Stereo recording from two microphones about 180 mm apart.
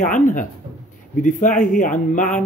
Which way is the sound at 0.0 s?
45° left (ahead or behind).